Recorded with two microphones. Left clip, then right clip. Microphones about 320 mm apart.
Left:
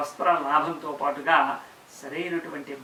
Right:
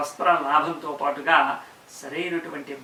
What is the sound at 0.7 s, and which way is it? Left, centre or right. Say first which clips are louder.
Speech: right 2 dB; left.